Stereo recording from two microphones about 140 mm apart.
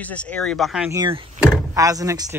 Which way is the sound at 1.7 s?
25° right (ahead or behind).